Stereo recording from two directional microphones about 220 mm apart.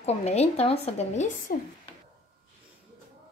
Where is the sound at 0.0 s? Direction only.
30° left (ahead or behind).